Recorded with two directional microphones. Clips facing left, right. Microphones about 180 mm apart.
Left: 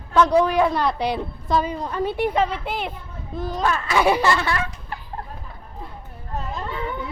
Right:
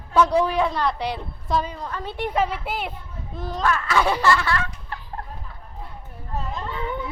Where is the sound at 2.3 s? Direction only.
5° right (ahead or behind).